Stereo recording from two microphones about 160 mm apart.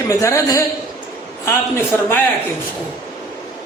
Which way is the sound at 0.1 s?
20° left (ahead or behind).